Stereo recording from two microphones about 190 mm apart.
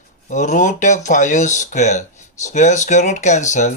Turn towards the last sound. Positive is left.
turn(degrees=40)  # may be behind; listen again after turning